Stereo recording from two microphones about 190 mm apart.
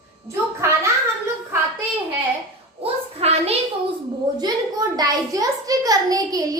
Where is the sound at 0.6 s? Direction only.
15° right (ahead or behind).